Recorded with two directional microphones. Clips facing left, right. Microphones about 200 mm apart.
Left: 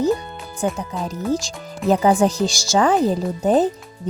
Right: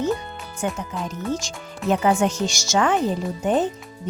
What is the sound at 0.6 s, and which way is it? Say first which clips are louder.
Speech: left 3 dB; 35° left (ahead or behind).